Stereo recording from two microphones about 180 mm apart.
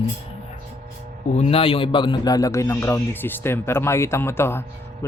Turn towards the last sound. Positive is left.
turn(degrees=15)  # may be behind; listen again after turning